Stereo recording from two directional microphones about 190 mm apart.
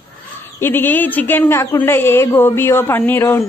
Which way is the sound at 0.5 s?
10° left (ahead or behind).